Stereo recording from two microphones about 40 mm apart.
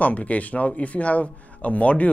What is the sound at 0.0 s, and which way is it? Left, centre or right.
Speech, left.